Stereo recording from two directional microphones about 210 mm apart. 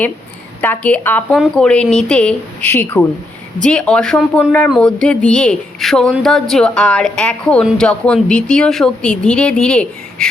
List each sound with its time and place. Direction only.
0.6 s speech: 10° left (ahead or behind)